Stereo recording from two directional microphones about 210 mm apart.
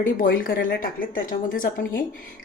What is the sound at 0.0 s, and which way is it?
Speech, 40° left (ahead or behind).